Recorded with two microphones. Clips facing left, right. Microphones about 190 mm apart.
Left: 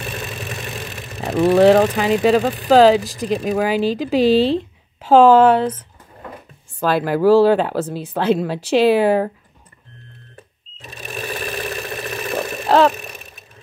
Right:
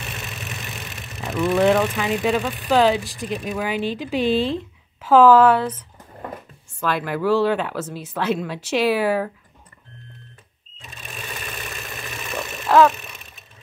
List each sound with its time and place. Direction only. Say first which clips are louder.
1.2 s speech: left 6 dB; 35° left (ahead or behind)
6.8 s speech: left 6 dB; 35° left (ahead or behind)
11.9 s engine: left 7 dB; 65° left (ahead or behind)
12.6 s a sound: left 1 dB; 30° left (ahead or behind)